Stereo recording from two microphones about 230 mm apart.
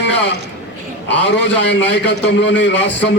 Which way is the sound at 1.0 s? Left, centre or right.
Left.